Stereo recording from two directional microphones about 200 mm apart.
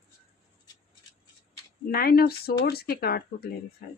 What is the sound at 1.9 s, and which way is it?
Speech, 50° left (ahead or behind).